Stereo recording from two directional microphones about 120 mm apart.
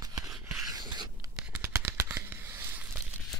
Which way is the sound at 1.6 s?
20° right (ahead or behind).